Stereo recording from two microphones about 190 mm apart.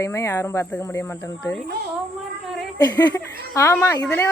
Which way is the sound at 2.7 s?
20° left (ahead or behind).